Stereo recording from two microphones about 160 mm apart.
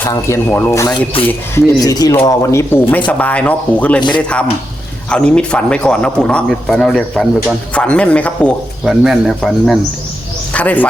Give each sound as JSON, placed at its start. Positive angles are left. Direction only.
{"t": 0.0, "sound": "a man's voice", "side_deg": 15}
{"t": 5.0, "sound": "a man's voice", "side_deg": 5}